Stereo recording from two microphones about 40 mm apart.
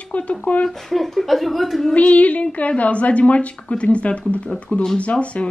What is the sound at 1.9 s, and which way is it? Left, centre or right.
A woman's voice, left.